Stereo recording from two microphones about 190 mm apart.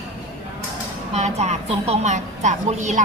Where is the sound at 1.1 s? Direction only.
35° right (ahead or behind).